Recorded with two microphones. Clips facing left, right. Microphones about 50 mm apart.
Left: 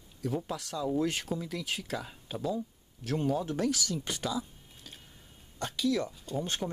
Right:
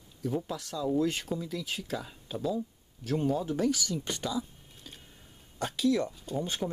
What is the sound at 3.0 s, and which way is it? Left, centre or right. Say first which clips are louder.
Speech: right 1 dB; centre.